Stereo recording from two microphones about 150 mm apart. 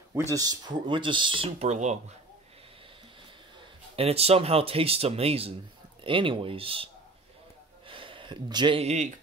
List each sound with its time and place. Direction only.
0.1 s speech: 20° right (ahead or behind); by 2.0 s 50° right (ahead or behind)
3.9 s speech: 40° right (ahead or behind)
7.9 s a sound: 35° right (ahead or behind)
8.8 s speech: 50° right (ahead or behind)